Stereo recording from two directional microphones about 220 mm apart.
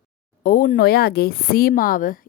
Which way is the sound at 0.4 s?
40° left (ahead or behind).